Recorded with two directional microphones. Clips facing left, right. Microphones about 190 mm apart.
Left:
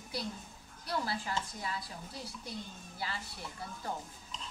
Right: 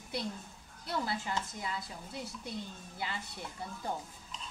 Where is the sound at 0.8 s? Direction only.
25° right (ahead or behind).